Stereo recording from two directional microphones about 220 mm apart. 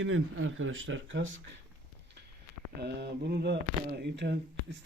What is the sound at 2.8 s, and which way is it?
Speech, 50° right (ahead or behind).